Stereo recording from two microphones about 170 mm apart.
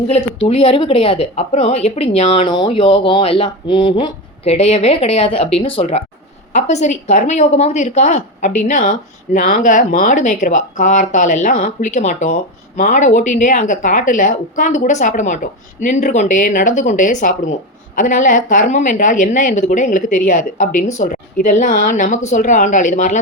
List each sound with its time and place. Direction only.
0.1 s a woman's voice: 35° left (ahead or behind)